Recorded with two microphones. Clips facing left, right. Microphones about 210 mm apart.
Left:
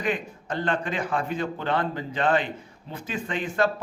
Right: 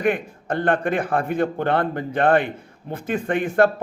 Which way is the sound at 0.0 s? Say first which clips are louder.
Right 6 dB; 55° right (ahead or behind).